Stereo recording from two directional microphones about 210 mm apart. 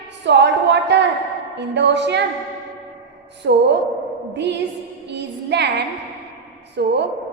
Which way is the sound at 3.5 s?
55° right (ahead or behind).